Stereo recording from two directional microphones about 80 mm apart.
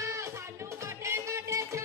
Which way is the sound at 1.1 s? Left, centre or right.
Right.